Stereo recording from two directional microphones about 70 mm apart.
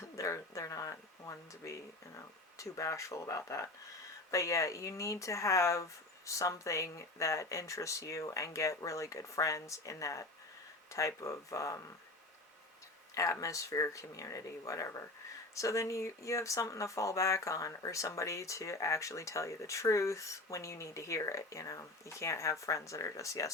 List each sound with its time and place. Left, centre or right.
0.2 s speech: left
13.4 s speech: left